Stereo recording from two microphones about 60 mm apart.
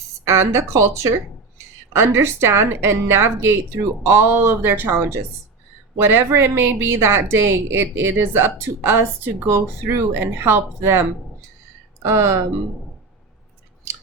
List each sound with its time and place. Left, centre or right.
0.3 s a woman's voice: right
12.0 s speech: right